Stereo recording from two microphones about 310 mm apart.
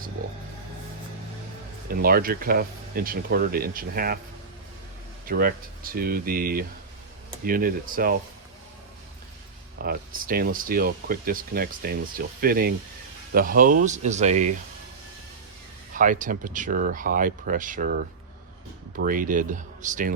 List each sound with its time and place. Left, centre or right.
1.9 s speech: right
5.2 s speech: right
9.7 s speech: right
15.9 s speech: right